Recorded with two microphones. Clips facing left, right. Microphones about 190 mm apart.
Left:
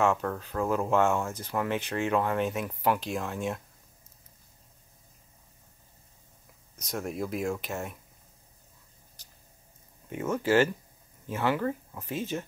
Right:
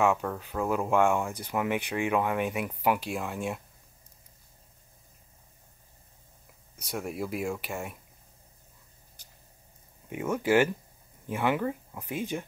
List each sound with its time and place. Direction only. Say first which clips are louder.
0.0 s speech: even; 10° right (ahead or behind)
6.9 s speech: left 1 dB; 5° right (ahead or behind)
10.0 s speech: even; 10° right (ahead or behind)